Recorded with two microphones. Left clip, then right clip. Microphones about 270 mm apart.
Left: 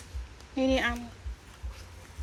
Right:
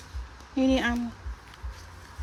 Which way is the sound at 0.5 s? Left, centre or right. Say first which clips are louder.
Right 2 dB; centre.